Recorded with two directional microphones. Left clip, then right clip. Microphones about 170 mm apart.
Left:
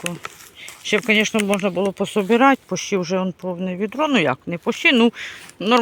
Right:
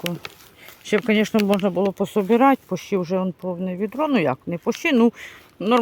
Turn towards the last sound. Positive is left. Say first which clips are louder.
# left 2 dB
turn(degrees=-5)  # may be behind; listen again after turning